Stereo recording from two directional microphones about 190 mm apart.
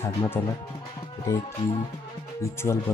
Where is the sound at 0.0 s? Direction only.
15° left (ahead or behind).